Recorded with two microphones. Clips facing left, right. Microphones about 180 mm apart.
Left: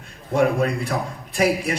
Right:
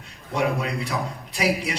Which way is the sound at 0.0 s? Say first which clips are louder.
Left 5 dB; 50° left (ahead or behind).